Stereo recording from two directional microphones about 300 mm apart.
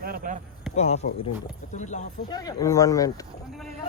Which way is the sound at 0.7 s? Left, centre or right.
Left.